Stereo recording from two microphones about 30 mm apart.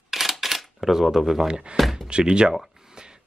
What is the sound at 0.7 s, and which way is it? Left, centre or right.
Speech, centre.